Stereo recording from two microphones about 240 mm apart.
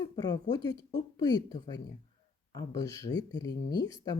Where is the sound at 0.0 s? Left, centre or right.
Centre.